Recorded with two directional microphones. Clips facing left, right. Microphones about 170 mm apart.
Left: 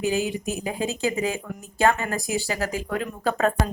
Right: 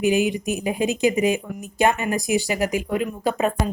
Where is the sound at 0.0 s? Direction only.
15° right (ahead or behind).